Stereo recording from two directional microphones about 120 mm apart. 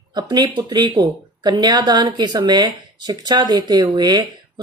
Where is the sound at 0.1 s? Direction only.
35° right (ahead or behind).